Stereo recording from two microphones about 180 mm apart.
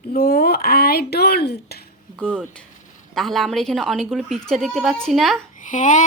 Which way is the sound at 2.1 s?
10° right (ahead or behind).